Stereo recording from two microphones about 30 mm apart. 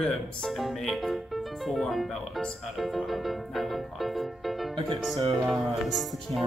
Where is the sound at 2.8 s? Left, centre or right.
Centre.